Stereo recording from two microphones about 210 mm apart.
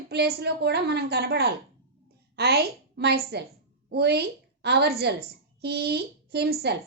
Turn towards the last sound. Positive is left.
turn(degrees=-50)  # may be behind; listen again after turning